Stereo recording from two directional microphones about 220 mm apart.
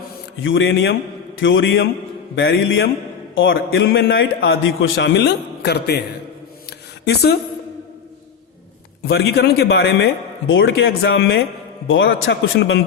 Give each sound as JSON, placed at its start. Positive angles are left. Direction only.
{"t": 0.4, "sound": "a man's voice", "side_deg": 55}
{"t": 6.7, "sound": "a sound", "side_deg": 50}
{"t": 9.0, "sound": "a man's voice", "side_deg": 50}
{"t": 10.4, "sound": "a man's voice", "side_deg": 60}
{"t": 11.9, "sound": "speech", "side_deg": 60}